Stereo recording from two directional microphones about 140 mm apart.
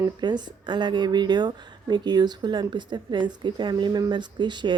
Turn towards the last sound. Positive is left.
turn(degrees=-35)  # may be behind; listen again after turning